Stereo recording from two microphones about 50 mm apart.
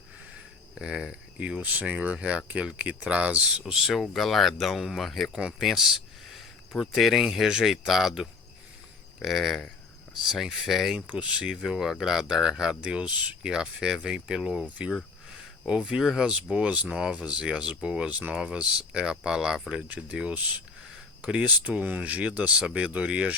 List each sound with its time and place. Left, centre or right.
0.8 s speech: centre
3.7 s speech: centre
4.1 s speech: centre
5.3 s speech: centre
11.0 s speech: right
11.5 s speech: centre
13.1 s speech: right
13.5 s speech: centre
16.0 s speech: centre
16.2 s speech: centre
18.3 s speech: centre
21.4 s speech: right